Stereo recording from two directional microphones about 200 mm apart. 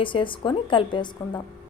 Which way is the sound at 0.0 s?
25° left (ahead or behind).